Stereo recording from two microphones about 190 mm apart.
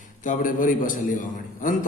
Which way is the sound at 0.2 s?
45° left (ahead or behind).